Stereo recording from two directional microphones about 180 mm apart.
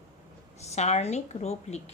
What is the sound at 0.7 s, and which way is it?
A woman's voice, 35° left (ahead or behind).